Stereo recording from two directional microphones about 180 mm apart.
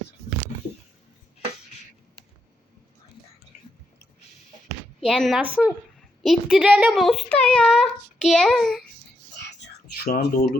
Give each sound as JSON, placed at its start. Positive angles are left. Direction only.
{"t": 4.9, "sound": "a child's voice", "side_deg": 0}
{"t": 10.0, "sound": "speech", "side_deg": 60}